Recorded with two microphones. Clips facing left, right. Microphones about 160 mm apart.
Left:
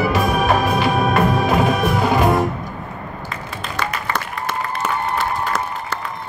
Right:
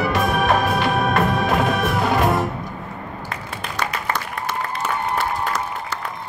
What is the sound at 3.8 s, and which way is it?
Applause, 55° left (ahead or behind).